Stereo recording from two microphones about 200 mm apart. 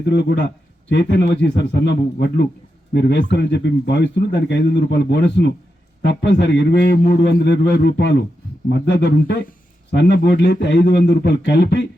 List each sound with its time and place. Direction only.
0.1 s a man's voice: 60° left (ahead or behind)